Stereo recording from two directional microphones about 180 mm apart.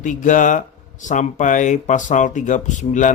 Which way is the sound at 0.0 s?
45° left (ahead or behind).